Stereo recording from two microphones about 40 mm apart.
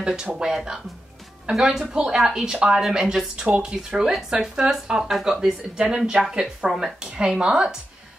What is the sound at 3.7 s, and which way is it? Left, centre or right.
Speech, centre.